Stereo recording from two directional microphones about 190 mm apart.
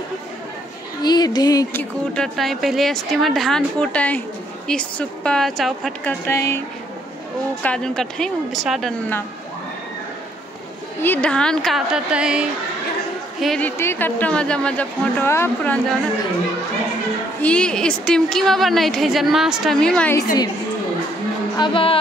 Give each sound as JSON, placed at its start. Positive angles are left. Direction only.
{"t": 1.0, "sound": "speech", "side_deg": 20}
{"t": 6.2, "sound": "speech", "side_deg": 15}
{"t": 7.6, "sound": "speech", "side_deg": 5}
{"t": 11.0, "sound": "speech", "side_deg": 10}
{"t": 17.4, "sound": "speech", "side_deg": 5}
{"t": 21.5, "sound": "music", "side_deg": 30}